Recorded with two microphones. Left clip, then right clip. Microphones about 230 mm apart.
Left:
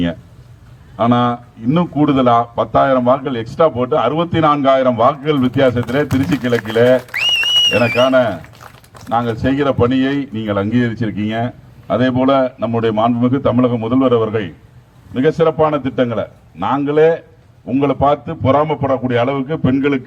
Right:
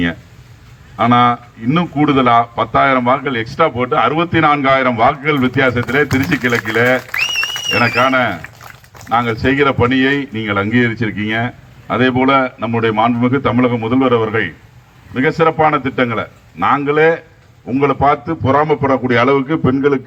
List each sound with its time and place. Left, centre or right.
0.9 s a man's voice: centre